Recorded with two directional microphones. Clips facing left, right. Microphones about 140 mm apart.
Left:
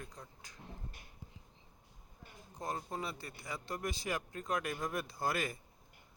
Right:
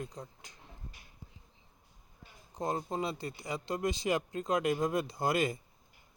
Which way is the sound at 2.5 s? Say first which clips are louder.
Right 6 dB; 25° right (ahead or behind).